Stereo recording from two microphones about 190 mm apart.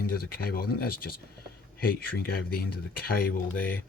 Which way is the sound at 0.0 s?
50° left (ahead or behind).